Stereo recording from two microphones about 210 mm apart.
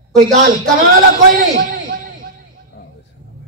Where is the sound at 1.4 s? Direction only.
40° right (ahead or behind).